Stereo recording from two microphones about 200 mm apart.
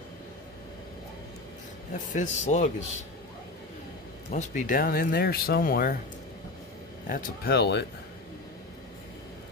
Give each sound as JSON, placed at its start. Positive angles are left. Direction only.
{"t": 2.1, "sound": "speech", "side_deg": 35}
{"t": 4.3, "sound": "speech", "side_deg": 40}
{"t": 7.1, "sound": "speech", "side_deg": 45}